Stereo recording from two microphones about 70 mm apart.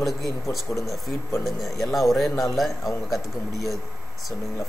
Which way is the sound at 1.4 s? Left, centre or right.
Centre.